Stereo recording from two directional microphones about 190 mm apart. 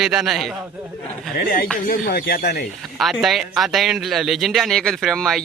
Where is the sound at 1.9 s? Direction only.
55° left (ahead or behind).